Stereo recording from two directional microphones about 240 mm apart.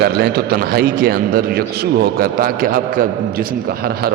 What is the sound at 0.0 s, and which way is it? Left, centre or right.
A man's voice, right.